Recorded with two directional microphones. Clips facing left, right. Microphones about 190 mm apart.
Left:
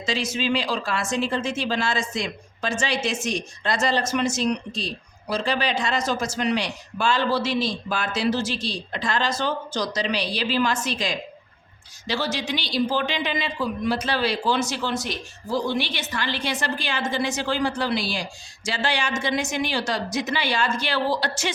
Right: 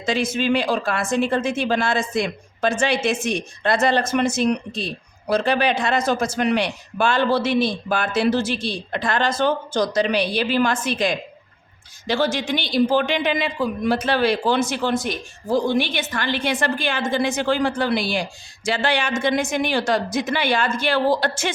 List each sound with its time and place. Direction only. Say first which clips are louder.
0.0 s speech: right 4 dB; 55° right (ahead or behind)